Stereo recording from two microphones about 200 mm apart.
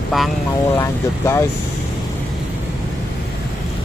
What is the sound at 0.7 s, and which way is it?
Speech, 15° left (ahead or behind).